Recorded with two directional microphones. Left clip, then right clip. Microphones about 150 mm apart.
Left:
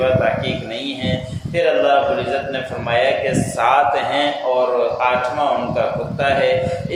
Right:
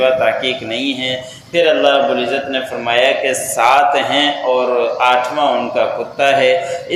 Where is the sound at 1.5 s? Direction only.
30° right (ahead or behind).